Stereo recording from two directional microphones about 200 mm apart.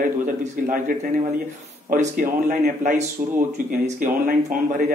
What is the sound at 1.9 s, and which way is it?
A man's voice, 40° right (ahead or behind).